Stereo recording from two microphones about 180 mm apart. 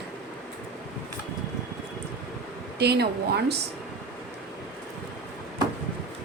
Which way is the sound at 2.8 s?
65° right (ahead or behind).